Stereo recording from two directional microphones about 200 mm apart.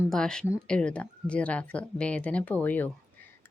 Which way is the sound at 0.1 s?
5° left (ahead or behind).